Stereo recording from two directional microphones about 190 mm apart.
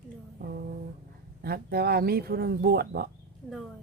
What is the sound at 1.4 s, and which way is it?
Speech, 55° right (ahead or behind).